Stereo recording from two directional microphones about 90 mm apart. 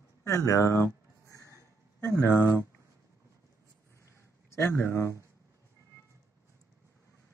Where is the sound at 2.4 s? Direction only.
30° left (ahead or behind).